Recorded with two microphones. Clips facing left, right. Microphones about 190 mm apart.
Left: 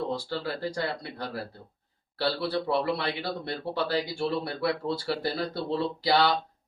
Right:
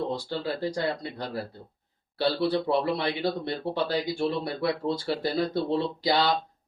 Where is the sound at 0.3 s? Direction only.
20° right (ahead or behind).